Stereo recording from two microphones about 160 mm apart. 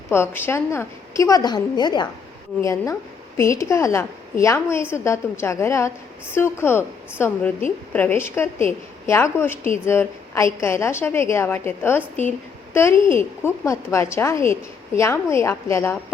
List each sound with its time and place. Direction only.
0.1 s a woman's voice: 15° left (ahead or behind)
13.1 s a woman's voice: 15° left (ahead or behind)